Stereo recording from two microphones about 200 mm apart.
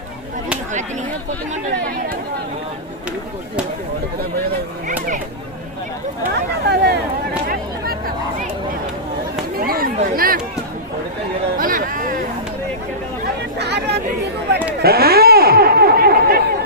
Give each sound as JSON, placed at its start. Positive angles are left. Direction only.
{"t": 6.3, "sound": "speech", "side_deg": -55}
{"t": 7.4, "sound": "a sound", "side_deg": -45}
{"t": 9.6, "sound": "chatter", "side_deg": -45}
{"t": 11.5, "sound": "chatter", "side_deg": -45}
{"t": 13.6, "sound": "chatter", "side_deg": -55}
{"t": 14.8, "sound": "a sound", "side_deg": -50}